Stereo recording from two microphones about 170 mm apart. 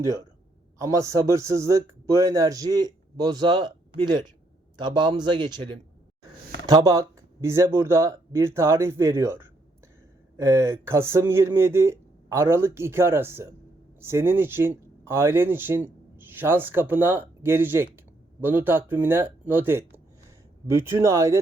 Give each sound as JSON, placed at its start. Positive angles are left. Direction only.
{"t": 0.8, "sound": "a man's voice", "side_deg": -20}
{"t": 4.9, "sound": "a man's voice", "side_deg": -25}
{"t": 6.7, "sound": "speech", "side_deg": -20}